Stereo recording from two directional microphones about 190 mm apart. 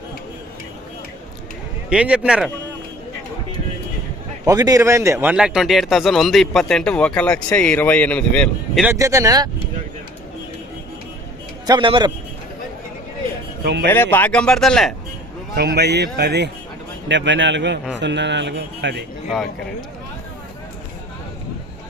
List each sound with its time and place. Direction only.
1.9 s a man's voice: 5° right (ahead or behind)
4.4 s a man's voice: 20° right (ahead or behind); by 8.8 s 5° left (ahead or behind)
8.8 s speech: 15° right (ahead or behind)
11.6 s a man's voice: 25° right (ahead or behind)
13.8 s a man's voice: 10° left (ahead or behind)
15.5 s speech: 60° right (ahead or behind)
17.1 s a man's voice: 75° right (ahead or behind)